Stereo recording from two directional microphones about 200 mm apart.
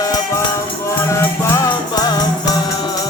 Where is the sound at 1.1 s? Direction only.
15° left (ahead or behind).